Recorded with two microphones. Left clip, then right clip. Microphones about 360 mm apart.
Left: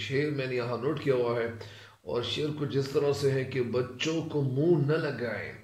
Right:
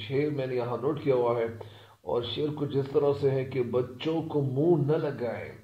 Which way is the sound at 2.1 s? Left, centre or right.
Centre.